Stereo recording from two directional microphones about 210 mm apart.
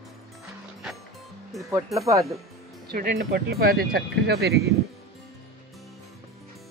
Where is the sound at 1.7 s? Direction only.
15° right (ahead or behind).